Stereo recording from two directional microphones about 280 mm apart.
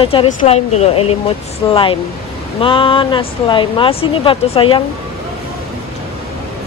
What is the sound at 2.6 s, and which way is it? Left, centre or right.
Speech, centre.